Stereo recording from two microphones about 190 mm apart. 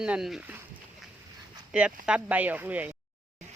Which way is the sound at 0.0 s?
5° right (ahead or behind).